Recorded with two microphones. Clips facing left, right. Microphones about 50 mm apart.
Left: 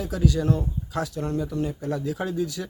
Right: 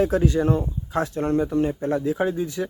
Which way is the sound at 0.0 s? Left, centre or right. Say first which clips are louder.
Right 5 dB; right.